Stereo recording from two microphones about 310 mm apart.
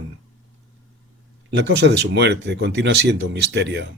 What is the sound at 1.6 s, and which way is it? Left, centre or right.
Speech, right.